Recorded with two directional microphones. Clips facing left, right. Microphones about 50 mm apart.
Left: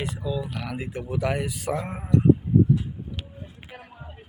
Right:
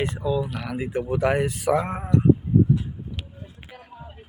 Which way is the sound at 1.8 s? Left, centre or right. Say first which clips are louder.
Right 5 dB; right.